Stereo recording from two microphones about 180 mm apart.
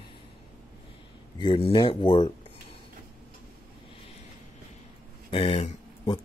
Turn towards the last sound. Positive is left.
turn(degrees=30)  # may be behind; listen again after turning